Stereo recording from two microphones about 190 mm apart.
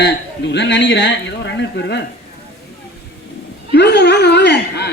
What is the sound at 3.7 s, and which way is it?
A man's voice, 60° left (ahead or behind).